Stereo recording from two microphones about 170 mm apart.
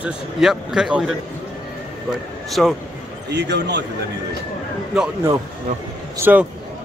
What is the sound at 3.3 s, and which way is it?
Speech, 90° right.